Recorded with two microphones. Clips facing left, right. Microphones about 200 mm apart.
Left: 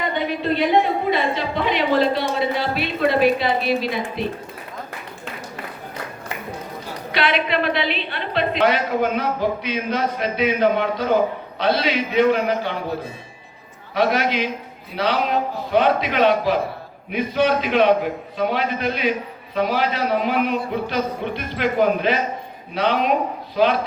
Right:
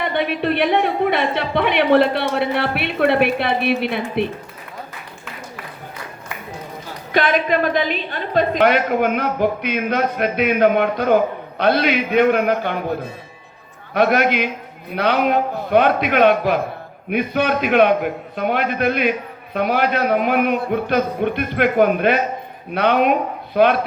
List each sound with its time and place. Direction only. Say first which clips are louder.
0.0 s a woman's voice: right 3 dB; 65° right (ahead or behind)
7.1 s a woman's voice: right 4 dB; 45° right (ahead or behind)
13.9 s a woman's voice: right 3 dB; 55° right (ahead or behind)